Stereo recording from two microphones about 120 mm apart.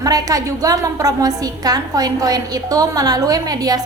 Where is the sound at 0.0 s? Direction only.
30° right (ahead or behind).